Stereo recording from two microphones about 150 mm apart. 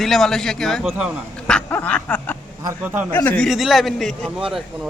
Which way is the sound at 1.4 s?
10° left (ahead or behind).